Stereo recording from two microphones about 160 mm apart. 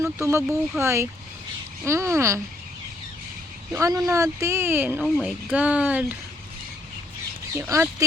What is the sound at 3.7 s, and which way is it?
Speech, 20° right (ahead or behind).